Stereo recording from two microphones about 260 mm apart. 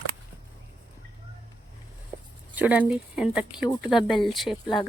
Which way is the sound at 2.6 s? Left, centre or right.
Centre.